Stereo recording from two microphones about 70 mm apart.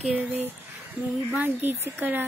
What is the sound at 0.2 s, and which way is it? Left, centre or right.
Speech, right.